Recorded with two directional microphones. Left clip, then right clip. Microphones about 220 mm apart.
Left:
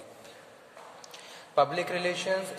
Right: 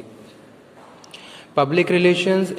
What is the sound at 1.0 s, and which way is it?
Speech, 5° right (ahead or behind).